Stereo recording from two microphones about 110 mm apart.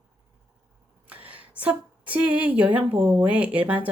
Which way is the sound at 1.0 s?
15° right (ahead or behind).